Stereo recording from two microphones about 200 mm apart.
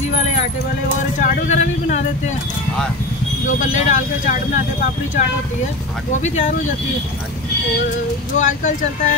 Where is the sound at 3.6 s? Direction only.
35° left (ahead or behind).